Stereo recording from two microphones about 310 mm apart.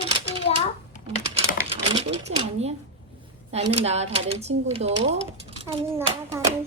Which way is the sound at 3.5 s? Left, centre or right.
Centre.